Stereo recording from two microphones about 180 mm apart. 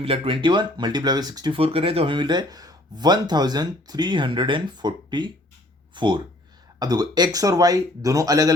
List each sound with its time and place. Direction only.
0.0 s speech: 30° right (ahead or behind)